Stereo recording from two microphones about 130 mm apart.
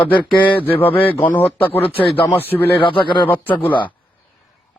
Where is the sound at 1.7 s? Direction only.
45° left (ahead or behind).